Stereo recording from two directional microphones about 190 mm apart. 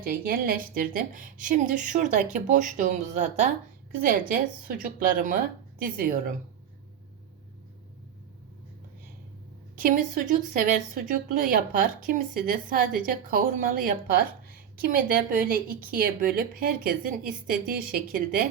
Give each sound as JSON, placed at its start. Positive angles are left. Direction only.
{"t": 0.0, "sound": "speech", "side_deg": -50}
{"t": 9.7, "sound": "speech", "side_deg": -45}